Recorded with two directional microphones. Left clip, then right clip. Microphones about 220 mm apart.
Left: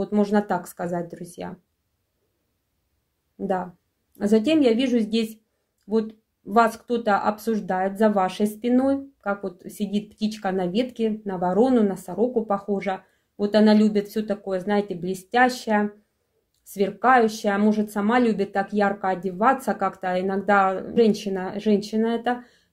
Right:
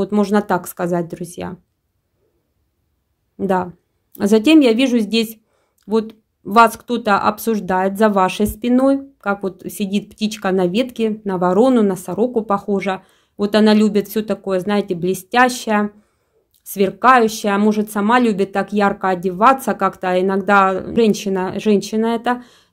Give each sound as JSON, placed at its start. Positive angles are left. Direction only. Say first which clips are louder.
{"t": 0.0, "sound": "speech", "louder": "right 5 dB", "side_deg": -35}
{"t": 3.3, "sound": "speech", "louder": "right 8 dB", "side_deg": -40}